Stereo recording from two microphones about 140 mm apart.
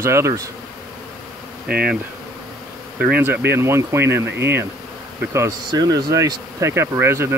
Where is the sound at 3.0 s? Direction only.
10° right (ahead or behind).